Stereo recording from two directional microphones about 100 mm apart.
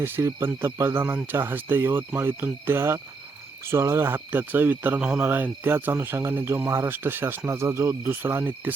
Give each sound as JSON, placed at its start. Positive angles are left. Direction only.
{"t": 0.0, "sound": "speech", "side_deg": -25}